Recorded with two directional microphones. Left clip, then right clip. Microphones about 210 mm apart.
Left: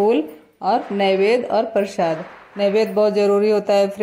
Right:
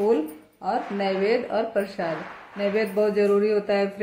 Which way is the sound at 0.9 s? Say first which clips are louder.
Left 6 dB; 30° left (ahead or behind).